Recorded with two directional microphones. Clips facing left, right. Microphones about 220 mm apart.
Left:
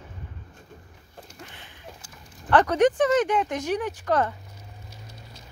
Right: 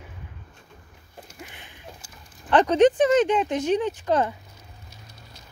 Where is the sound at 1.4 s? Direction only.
15° right (ahead or behind).